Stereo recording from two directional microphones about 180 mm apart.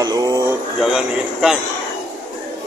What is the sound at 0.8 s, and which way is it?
Speech, 5° right (ahead or behind).